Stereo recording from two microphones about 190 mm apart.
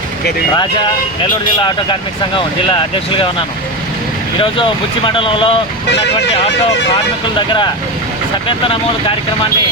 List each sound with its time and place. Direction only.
1.2 s speech: 25° left (ahead or behind)
4.4 s speech: 25° left (ahead or behind)
7.3 s speech: 25° left (ahead or behind)